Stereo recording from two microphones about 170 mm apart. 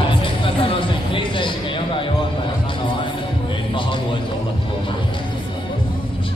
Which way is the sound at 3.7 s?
30° left (ahead or behind).